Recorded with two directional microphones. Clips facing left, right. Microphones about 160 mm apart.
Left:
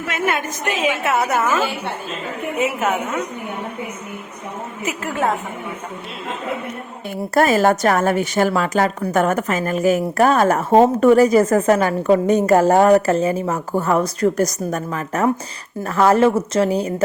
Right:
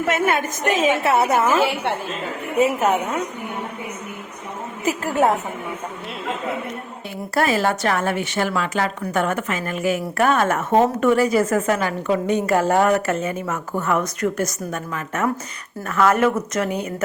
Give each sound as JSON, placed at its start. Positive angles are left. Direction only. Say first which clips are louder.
{"t": 0.8, "sound": "a woman's voice", "louder": "right 1 dB", "side_deg": -35}
{"t": 2.6, "sound": "a woman's voice", "louder": "right 3 dB", "side_deg": -35}
{"t": 4.9, "sound": "a woman's voice", "louder": "right 4 dB", "side_deg": -40}
{"t": 7.3, "sound": "a woman's voice", "louder": "left 5 dB", "side_deg": 45}